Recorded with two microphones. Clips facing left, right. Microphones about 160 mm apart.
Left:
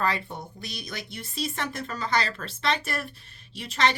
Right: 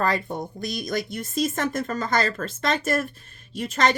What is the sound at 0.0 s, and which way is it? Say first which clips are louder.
A woman's voice: right 4 dB; 45° right (ahead or behind).